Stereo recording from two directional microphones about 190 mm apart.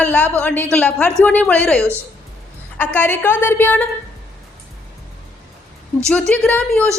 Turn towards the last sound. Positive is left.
turn(degrees=5)  # may be behind; listen again after turning